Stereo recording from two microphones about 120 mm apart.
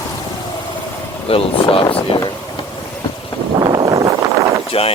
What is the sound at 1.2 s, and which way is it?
Speech, 50° left (ahead or behind).